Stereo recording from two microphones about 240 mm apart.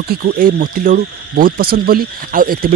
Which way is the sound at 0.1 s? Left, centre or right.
Right.